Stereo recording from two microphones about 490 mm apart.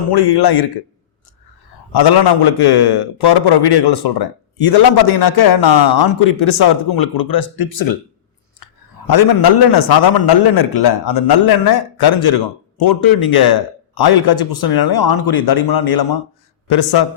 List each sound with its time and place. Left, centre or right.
0.1 s a man's voice: left
1.9 s a man's voice: left
9.0 s a man's voice: left